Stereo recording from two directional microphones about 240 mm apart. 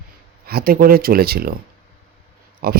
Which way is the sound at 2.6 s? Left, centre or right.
Right.